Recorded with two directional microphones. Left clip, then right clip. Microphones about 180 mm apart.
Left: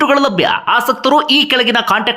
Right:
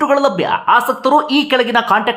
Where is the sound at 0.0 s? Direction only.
20° left (ahead or behind).